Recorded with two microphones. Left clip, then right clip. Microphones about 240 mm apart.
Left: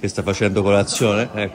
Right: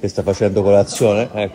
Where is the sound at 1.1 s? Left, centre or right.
Centre.